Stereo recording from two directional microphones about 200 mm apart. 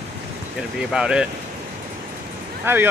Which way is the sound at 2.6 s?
10° right (ahead or behind).